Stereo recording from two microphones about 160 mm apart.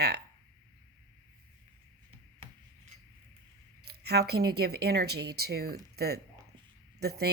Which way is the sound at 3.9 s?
90° right.